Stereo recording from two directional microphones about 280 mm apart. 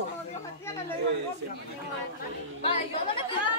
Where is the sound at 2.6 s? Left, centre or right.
Centre.